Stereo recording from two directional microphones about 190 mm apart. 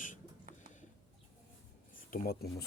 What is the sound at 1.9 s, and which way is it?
Speech, 50° left (ahead or behind).